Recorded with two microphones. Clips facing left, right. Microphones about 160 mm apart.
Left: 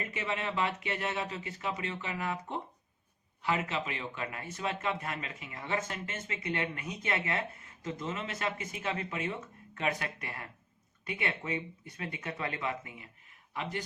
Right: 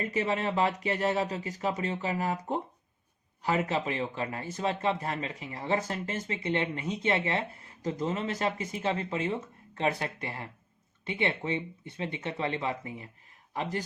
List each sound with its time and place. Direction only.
0.0 s a man's voice: 35° right (ahead or behind)